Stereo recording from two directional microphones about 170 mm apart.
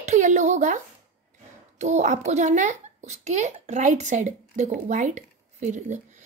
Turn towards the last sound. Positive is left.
turn(degrees=-45)  # may be behind; listen again after turning